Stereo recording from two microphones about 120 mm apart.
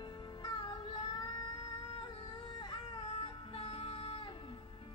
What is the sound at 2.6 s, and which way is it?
Music, 40° left (ahead or behind).